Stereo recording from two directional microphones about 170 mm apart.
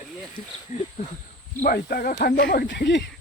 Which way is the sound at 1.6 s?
60° left (ahead or behind).